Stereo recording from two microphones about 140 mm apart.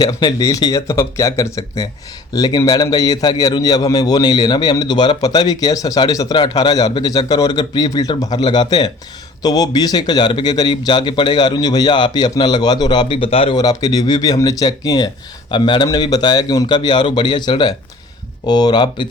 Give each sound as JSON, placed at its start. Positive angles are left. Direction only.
{"t": 0.0, "sound": "a man's voice", "side_deg": 30}
{"t": 13.6, "sound": "a man's voice", "side_deg": 25}